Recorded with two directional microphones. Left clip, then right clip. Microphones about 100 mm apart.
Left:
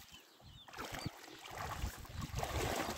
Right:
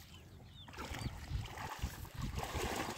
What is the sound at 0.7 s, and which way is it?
Boat, 15° left (ahead or behind).